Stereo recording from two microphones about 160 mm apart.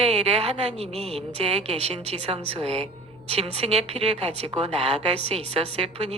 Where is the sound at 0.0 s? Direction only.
40° right (ahead or behind).